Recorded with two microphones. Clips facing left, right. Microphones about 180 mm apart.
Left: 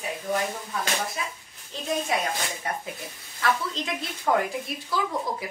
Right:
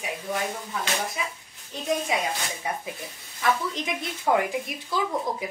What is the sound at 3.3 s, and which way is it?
A woman's voice, 20° right (ahead or behind).